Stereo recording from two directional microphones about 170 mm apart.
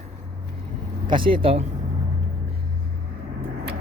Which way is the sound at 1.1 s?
30° right (ahead or behind).